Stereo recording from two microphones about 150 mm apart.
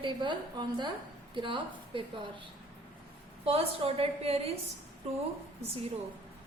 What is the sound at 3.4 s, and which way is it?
A woman's voice, 40° right (ahead or behind).